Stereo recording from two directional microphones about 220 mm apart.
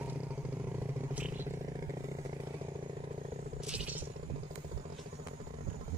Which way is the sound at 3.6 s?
5° right (ahead or behind).